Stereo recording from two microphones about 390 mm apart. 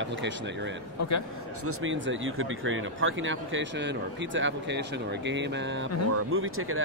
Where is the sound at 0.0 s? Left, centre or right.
Right.